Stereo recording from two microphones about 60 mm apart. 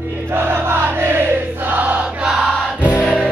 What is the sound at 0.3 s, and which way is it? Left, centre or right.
Music, right.